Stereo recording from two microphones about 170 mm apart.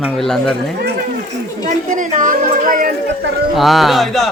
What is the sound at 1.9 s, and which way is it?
Music, 50° right (ahead or behind).